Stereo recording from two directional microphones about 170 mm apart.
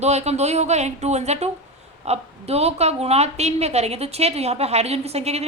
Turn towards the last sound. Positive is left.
turn(degrees=-40)  # may be behind; listen again after turning